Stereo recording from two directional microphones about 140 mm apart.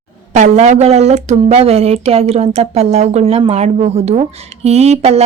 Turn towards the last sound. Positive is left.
turn(degrees=-50)  # may be behind; listen again after turning